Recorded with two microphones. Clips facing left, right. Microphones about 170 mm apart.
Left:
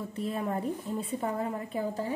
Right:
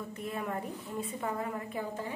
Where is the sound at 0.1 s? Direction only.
30° left (ahead or behind).